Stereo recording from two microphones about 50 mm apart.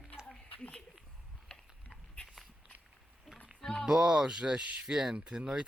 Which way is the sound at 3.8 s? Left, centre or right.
Centre.